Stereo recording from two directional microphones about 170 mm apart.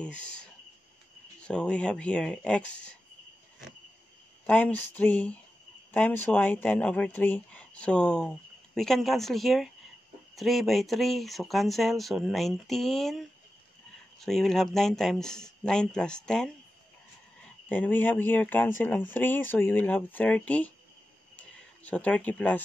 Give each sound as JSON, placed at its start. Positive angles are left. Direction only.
{"t": 0.0, "sound": "speech", "side_deg": 5}
{"t": 4.5, "sound": "speech", "side_deg": 10}
{"t": 17.6, "sound": "speech", "side_deg": 10}
{"t": 21.4, "sound": "a sound", "side_deg": 10}